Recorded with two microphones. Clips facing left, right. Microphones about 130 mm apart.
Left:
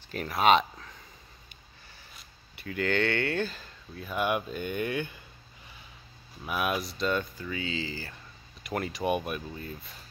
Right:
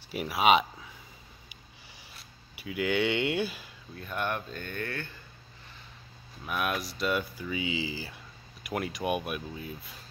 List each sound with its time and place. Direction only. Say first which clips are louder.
0.1 s speech: left 1 dB; 10° right (ahead or behind)
2.1 s speech: right 1 dB; 5° right (ahead or behind)
3.9 s speech: left 4 dB; 5° left (ahead or behind)
6.4 s speech: left 2 dB; 5° left (ahead or behind)